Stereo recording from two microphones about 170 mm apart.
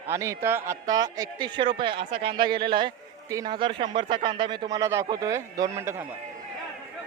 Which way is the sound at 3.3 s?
25° right (ahead or behind).